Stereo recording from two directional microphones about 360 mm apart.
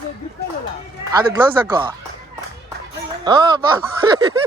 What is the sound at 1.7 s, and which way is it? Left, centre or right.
Speech, centre.